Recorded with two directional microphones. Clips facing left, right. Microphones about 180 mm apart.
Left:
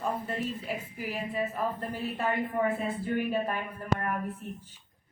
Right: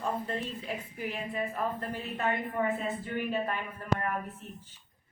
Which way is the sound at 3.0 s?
10° left (ahead or behind).